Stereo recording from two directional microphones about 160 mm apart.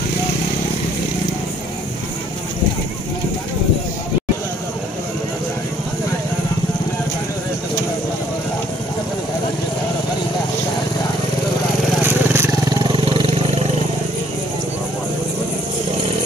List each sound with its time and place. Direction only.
12.0 s vehicle: 15° right (ahead or behind)
12.9 s vehicle: 35° right (ahead or behind)